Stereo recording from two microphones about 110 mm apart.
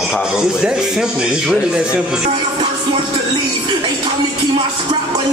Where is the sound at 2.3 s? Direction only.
50° right (ahead or behind).